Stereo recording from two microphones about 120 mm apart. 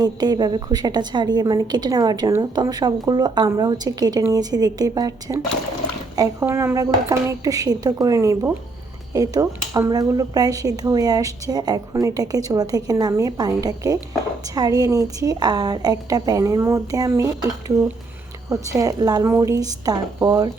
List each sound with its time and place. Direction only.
0.0 s speech: 35° right (ahead or behind)
6.4 s a woman's voice: 20° right (ahead or behind)